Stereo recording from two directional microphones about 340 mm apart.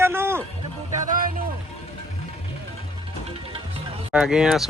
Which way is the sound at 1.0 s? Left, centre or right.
Right.